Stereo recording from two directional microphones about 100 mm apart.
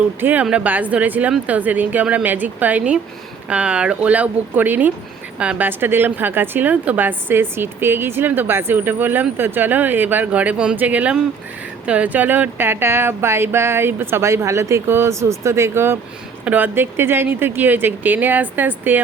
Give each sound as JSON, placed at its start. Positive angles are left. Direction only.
{"t": 0.2, "sound": "a woman's voice", "side_deg": -15}